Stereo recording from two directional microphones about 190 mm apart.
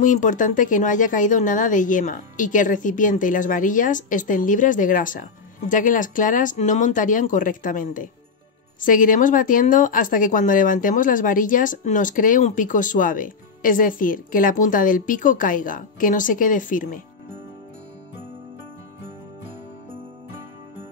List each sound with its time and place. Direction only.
0.0 s a woman's voice: 40° left (ahead or behind)